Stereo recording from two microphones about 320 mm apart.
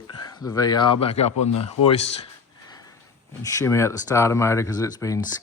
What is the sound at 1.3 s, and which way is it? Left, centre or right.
Speech, left.